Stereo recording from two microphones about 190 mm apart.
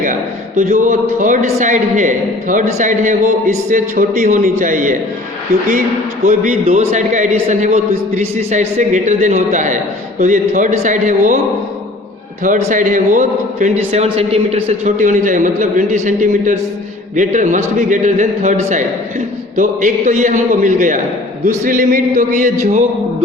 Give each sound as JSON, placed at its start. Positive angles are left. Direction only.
{"t": 0.0, "sound": "speech", "side_deg": -45}
{"t": 6.2, "sound": "speech", "side_deg": -40}
{"t": 12.4, "sound": "speech", "side_deg": -40}